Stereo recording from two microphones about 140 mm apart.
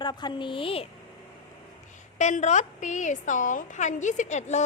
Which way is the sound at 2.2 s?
60° left (ahead or behind).